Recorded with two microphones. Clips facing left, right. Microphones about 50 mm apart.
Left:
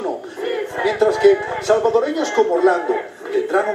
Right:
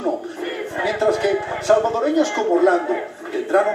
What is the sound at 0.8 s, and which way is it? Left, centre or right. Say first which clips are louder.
A man's voice: left 6 dB; right.